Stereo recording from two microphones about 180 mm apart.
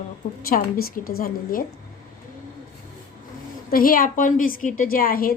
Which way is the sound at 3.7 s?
55° left (ahead or behind).